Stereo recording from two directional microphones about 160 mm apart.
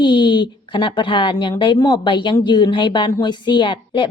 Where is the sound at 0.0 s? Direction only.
30° left (ahead or behind).